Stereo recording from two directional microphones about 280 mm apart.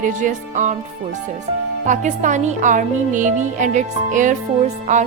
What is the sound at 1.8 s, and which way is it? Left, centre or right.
Speech, right.